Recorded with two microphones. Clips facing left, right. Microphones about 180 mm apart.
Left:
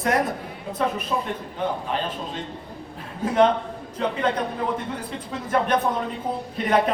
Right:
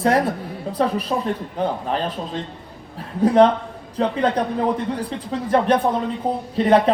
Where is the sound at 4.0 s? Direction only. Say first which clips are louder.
Right 4 dB; 35° right (ahead or behind).